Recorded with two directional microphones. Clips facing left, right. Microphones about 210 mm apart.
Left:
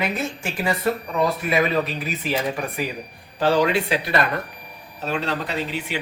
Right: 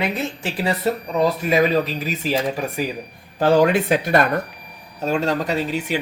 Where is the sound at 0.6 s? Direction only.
35° right (ahead or behind).